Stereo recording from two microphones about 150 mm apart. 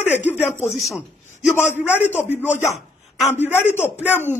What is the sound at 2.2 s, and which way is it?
Speech, 10° right (ahead or behind).